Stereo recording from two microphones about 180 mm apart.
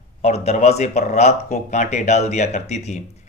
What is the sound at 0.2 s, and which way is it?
Speech, 35° left (ahead or behind).